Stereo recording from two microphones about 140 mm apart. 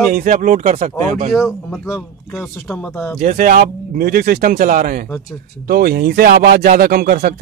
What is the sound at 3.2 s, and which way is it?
Speech, 75° right (ahead or behind).